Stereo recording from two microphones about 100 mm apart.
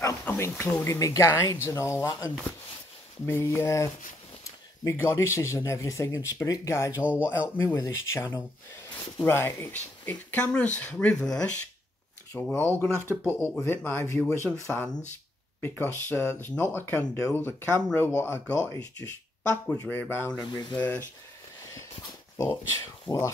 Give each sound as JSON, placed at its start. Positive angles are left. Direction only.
{"t": 0.2, "sound": "speech", "side_deg": 25}
{"t": 0.9, "sound": "speech", "side_deg": 35}
{"t": 6.9, "sound": "speech", "side_deg": -15}
{"t": 7.2, "sound": "speech", "side_deg": 25}
{"t": 9.2, "sound": "speech", "side_deg": 25}
{"t": 15.6, "sound": "speech", "side_deg": 20}
{"t": 18.5, "sound": "speech", "side_deg": 35}
{"t": 19.5, "sound": "speech", "side_deg": 15}
{"t": 20.3, "sound": "speech", "side_deg": 45}
{"t": 21.7, "sound": "dog", "side_deg": 30}
{"t": 23.1, "sound": "speech", "side_deg": 45}